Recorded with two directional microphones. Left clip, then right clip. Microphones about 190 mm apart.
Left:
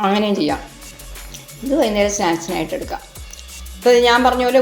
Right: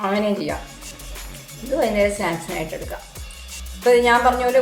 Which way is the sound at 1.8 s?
40° left (ahead or behind).